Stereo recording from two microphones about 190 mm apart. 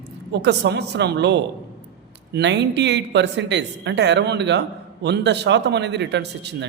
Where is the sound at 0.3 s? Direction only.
65° right (ahead or behind).